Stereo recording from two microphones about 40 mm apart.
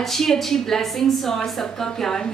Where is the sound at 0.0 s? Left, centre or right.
Centre.